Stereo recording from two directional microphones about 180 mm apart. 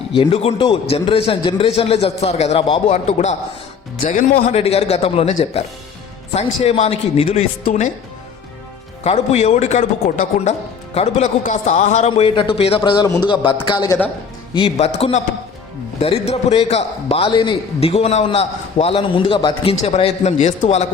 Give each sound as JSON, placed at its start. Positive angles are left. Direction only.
{"t": 0.2, "sound": "a man's voice", "side_deg": 35}
{"t": 9.0, "sound": "a man's voice", "side_deg": 35}
{"t": 14.5, "sound": "a man's voice", "side_deg": 35}